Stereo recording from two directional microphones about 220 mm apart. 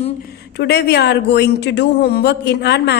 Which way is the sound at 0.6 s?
50° left (ahead or behind).